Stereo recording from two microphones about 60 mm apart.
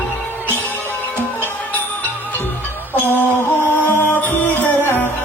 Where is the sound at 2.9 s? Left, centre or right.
Left.